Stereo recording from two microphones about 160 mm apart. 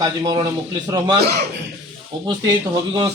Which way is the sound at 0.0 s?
25° right (ahead or behind).